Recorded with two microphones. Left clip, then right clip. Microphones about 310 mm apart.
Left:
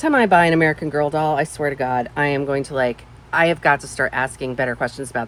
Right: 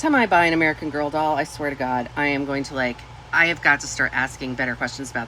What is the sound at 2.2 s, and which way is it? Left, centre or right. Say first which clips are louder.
Speech: left 3 dB; left.